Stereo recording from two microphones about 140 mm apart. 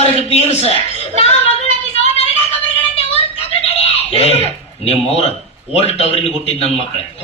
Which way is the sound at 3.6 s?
45° left (ahead or behind).